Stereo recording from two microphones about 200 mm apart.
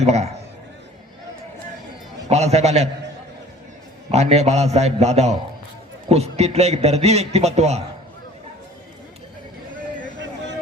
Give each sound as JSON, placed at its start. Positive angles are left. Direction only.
{"t": 0.0, "sound": "a man's voice", "side_deg": -35}
{"t": 2.3, "sound": "a man's voice", "side_deg": -35}
{"t": 4.1, "sound": "a man's voice", "side_deg": -35}